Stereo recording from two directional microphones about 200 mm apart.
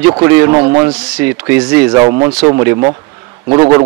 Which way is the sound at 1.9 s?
25° right (ahead or behind).